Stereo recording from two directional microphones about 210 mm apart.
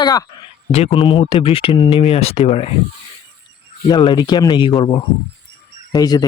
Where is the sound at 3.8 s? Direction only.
20° left (ahead or behind).